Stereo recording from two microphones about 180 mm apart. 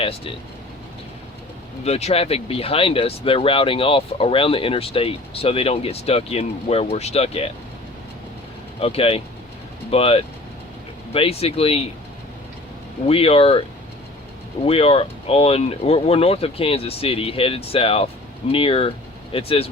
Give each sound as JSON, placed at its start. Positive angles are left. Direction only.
{"t": 1.8, "sound": "speech", "side_deg": 35}
{"t": 8.8, "sound": "speech", "side_deg": 35}
{"t": 13.1, "sound": "speech", "side_deg": 30}